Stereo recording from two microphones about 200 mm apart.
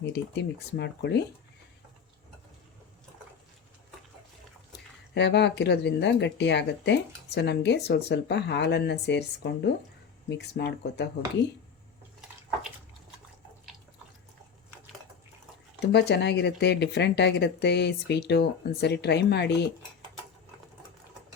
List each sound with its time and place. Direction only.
0.0 s speech: 55° left (ahead or behind)
5.1 s speech: 60° left (ahead or behind)
15.8 s speech: 55° left (ahead or behind)